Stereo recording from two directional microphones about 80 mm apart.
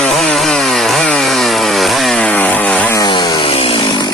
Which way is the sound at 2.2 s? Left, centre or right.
Centre.